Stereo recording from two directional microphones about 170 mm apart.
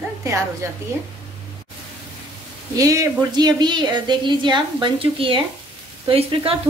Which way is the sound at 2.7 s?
20° right (ahead or behind).